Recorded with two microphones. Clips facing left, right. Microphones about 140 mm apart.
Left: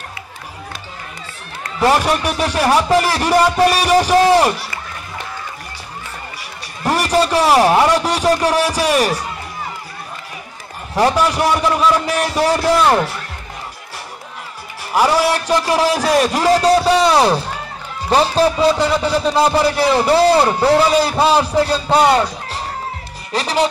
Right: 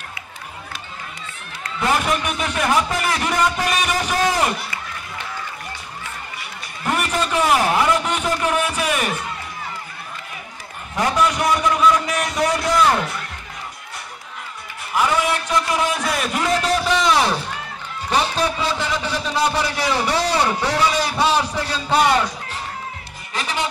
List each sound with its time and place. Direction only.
1.8 s a man's voice: 35° left (ahead or behind)
6.8 s a sound: 35° left (ahead or behind)
7.4 s a man's voice: 35° left (ahead or behind)
8.3 s speech: 75° left (ahead or behind)
8.6 s a man's voice: 35° left (ahead or behind)
11.0 s a man's voice: 35° left (ahead or behind)
14.9 s a man's voice: 35° left (ahead or behind)